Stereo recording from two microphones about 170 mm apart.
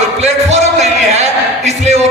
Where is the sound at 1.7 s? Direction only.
40° right (ahead or behind).